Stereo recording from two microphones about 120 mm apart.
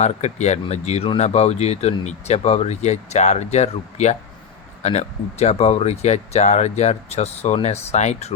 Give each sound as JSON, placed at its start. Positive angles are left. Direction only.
{"t": 0.0, "sound": "speech", "side_deg": 70}
{"t": 1.0, "sound": "speech", "side_deg": 55}